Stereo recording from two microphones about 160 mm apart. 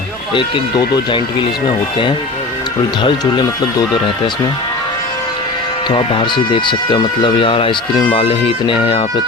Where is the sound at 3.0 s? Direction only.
25° left (ahead or behind).